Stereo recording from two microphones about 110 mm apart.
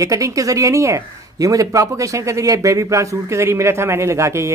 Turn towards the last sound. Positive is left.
turn(degrees=-25)  # may be behind; listen again after turning